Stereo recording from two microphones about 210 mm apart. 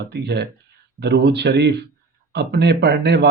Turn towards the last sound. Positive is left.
turn(degrees=-50)  # may be behind; listen again after turning